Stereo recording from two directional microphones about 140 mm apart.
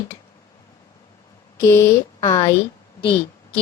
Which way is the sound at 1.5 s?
20° left (ahead or behind).